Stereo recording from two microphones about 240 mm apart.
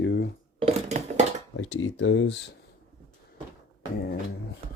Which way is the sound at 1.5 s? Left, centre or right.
Left.